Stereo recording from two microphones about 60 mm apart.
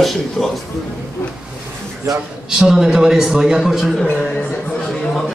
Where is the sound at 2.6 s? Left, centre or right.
Centre.